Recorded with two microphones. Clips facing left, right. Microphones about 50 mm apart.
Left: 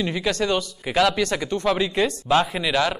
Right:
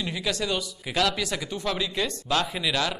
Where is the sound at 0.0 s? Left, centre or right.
Left.